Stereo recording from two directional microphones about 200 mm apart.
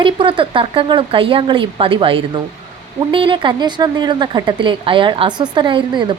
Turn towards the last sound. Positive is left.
turn(degrees=-25)  # may be behind; listen again after turning